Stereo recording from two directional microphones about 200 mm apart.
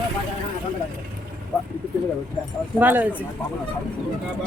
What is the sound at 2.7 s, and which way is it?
Speech, 10° right (ahead or behind).